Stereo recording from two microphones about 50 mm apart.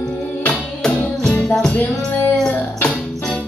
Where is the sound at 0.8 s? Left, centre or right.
Centre.